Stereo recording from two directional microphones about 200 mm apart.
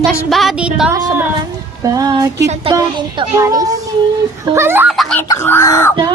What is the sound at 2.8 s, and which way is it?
Speech, 20° right (ahead or behind).